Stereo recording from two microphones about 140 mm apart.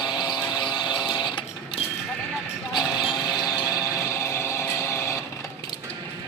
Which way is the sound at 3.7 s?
25° left (ahead or behind).